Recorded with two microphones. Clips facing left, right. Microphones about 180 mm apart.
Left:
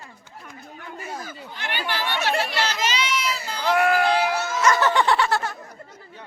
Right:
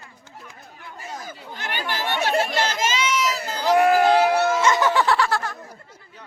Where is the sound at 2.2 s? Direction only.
45° right (ahead or behind).